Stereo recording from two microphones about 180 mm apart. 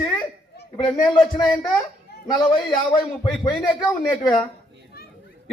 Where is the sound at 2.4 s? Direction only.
25° left (ahead or behind).